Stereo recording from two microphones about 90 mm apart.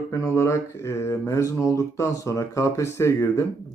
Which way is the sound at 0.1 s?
30° left (ahead or behind).